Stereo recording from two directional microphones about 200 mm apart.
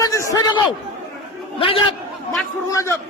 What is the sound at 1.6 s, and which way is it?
Speech, 30° left (ahead or behind).